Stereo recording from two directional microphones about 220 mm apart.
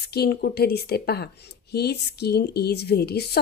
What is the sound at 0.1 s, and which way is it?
Speech, 45° left (ahead or behind).